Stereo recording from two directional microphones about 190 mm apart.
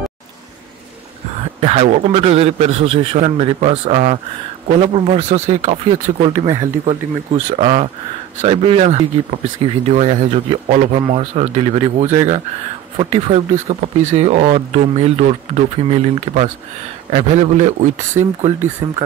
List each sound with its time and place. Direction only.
1.6 s speech: 35° right (ahead or behind)
6.4 s speech: 25° right (ahead or behind); by 19.0 s 40° right (ahead or behind)